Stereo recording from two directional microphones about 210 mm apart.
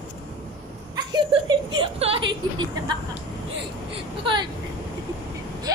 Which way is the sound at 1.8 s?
25° right (ahead or behind).